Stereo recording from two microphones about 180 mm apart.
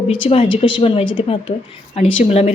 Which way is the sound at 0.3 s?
30° left (ahead or behind).